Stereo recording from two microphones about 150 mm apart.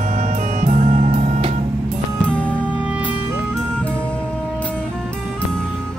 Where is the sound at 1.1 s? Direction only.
40° right (ahead or behind).